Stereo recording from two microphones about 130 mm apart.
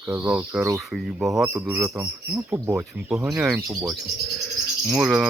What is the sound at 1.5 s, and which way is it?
Speech, 15° right (ahead or behind).